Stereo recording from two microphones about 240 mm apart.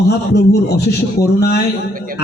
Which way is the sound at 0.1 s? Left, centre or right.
Left.